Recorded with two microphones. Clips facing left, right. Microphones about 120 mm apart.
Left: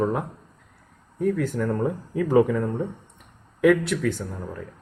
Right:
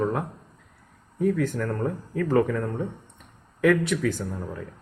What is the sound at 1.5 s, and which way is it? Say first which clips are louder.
Speech: left 3 dB; 10° left (ahead or behind).